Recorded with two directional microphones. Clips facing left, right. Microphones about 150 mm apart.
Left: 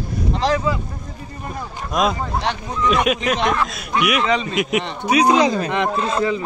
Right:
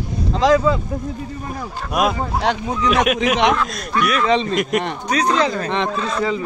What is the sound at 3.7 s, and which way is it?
Speech, 10° left (ahead or behind).